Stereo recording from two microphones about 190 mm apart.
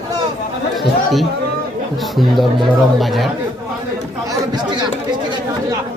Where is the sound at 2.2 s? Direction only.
Centre (ahead or behind).